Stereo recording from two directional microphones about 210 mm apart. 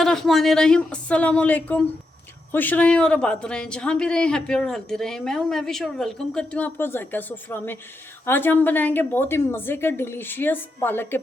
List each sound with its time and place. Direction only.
0.0 s a woman's voice: centre (ahead or behind)